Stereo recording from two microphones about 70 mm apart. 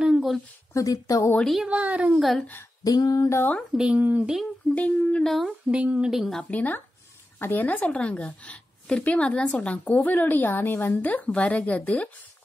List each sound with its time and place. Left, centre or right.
0.0 s a sound: centre
0.7 s speech: left
1.7 s speech: centre
2.1 s speech: centre
2.8 s speech: left
3.3 s a woman's voice: left
3.7 s speech: centre
4.7 s a woman's voice: left
5.2 s speech: centre
5.7 s speech: centre
6.1 s speech: centre
6.5 s a woman's voice: left